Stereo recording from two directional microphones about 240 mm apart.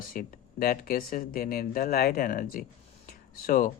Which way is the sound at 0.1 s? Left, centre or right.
Left.